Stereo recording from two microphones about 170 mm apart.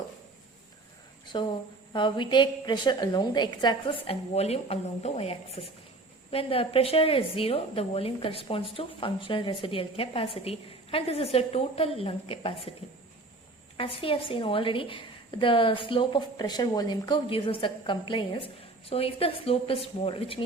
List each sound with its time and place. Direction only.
1.3 s a woman's voice: 30° left (ahead or behind)
13.7 s a woman's voice: 30° left (ahead or behind)